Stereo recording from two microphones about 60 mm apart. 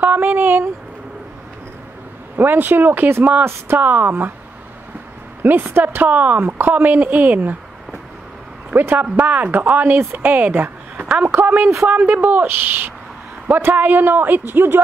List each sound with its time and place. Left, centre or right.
0.0 s a sound: right
2.3 s speech: right
5.4 s speech: right
6.0 s speech: right
9.1 s speech: right